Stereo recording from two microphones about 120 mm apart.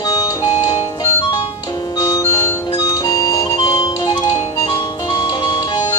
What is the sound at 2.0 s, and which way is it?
Music, 25° left (ahead or behind).